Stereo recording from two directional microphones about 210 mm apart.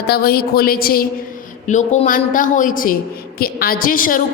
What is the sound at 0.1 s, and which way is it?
A woman's voice, 45° left (ahead or behind).